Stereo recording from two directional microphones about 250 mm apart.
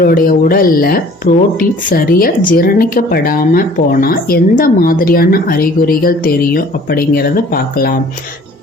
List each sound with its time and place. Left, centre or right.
0.0 s speech: left